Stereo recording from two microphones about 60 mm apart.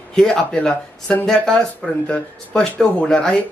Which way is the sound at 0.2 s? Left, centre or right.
Centre.